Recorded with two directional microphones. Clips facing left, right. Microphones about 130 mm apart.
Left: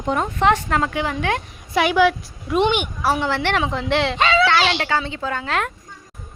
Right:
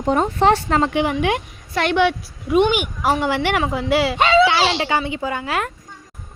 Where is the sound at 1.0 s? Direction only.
15° right (ahead or behind).